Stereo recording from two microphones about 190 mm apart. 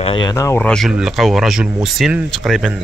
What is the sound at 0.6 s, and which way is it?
Speech, centre (ahead or behind).